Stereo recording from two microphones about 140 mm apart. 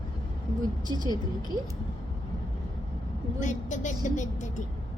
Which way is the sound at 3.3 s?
60° left (ahead or behind).